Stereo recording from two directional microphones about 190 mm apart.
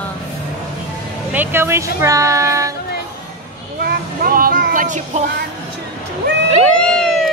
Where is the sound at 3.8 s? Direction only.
50° right (ahead or behind).